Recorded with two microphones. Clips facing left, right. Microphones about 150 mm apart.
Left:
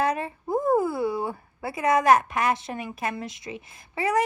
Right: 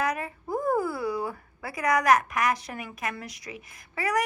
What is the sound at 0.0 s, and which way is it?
A woman's voice, 30° left (ahead or behind).